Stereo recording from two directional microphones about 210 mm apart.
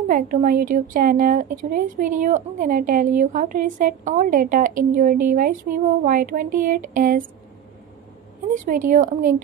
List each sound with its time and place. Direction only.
0.1 s a woman's voice: 40° right (ahead or behind)
8.5 s a woman's voice: 40° right (ahead or behind)